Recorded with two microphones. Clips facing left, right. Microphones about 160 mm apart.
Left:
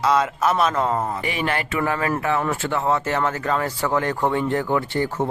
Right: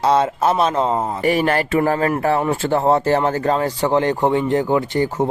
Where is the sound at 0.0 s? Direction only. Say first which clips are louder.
Right 3 dB; 30° right (ahead or behind).